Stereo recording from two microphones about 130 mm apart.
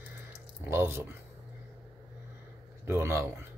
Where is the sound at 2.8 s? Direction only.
20° right (ahead or behind).